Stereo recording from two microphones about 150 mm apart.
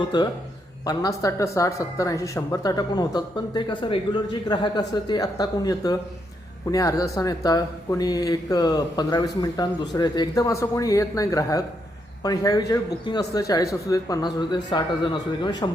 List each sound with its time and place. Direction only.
0.1 s speech: 30° left (ahead or behind)